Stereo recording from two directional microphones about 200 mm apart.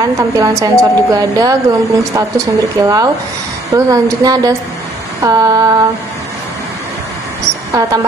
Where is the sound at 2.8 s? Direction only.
15° right (ahead or behind).